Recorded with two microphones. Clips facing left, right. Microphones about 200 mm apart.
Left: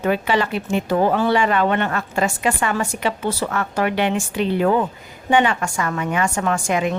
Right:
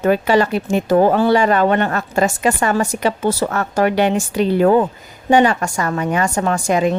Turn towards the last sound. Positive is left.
turn(degrees=-35)  # may be behind; listen again after turning